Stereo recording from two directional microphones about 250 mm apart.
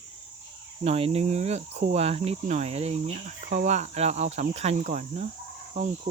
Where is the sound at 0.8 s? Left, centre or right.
Right.